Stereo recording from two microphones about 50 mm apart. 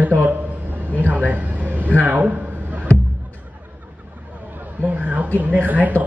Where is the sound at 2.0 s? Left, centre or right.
Right.